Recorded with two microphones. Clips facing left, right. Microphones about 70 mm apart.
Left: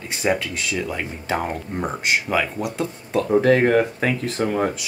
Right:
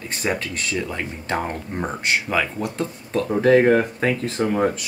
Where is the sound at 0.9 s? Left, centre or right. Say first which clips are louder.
Left 1 dB; centre.